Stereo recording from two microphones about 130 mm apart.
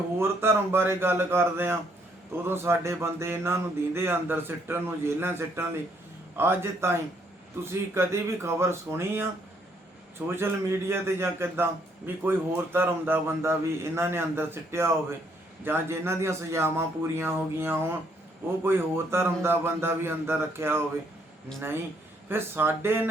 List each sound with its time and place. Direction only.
0.2 s a man's voice: 20° right (ahead or behind)
10.2 s a man's voice: 20° right (ahead or behind)
22.3 s speech: 15° right (ahead or behind)